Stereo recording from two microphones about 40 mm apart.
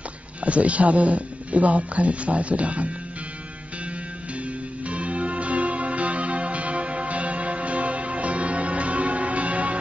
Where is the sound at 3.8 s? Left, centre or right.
Right.